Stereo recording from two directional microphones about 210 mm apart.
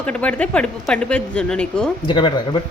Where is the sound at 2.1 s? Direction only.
20° left (ahead or behind).